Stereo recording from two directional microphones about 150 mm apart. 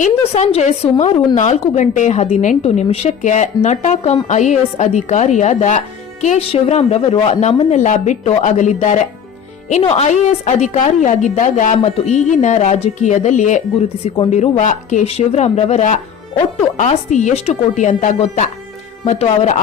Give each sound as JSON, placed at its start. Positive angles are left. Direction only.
{"t": 0.0, "sound": "a woman's voice", "side_deg": 50}